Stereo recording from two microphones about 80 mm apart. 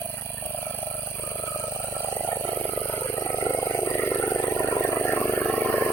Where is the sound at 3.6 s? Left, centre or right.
Left.